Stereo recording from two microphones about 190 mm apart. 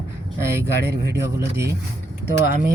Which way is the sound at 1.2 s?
15° right (ahead or behind).